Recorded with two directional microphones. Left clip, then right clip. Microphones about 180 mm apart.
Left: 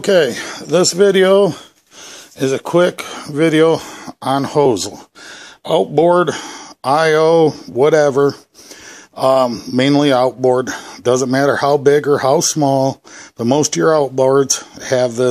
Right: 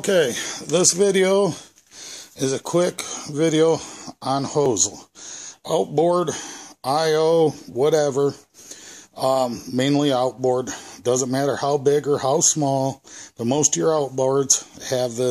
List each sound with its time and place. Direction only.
0.0 s speech: 35° left (ahead or behind)